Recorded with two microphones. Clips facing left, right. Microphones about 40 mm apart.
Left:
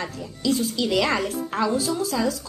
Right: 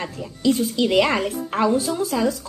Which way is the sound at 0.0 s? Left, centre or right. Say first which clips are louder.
Right 4 dB; right.